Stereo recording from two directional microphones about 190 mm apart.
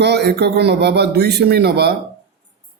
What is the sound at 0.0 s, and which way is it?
Speech, 60° right (ahead or behind).